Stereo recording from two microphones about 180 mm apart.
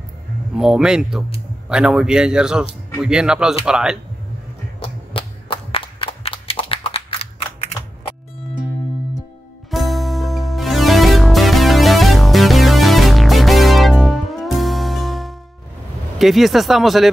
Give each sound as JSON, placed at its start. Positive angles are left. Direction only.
{"t": 0.6, "sound": "speech", "side_deg": -5}
{"t": 4.7, "sound": "a sound", "side_deg": 30}
{"t": 9.7, "sound": "music", "side_deg": 0}
{"t": 16.2, "sound": "speech", "side_deg": 0}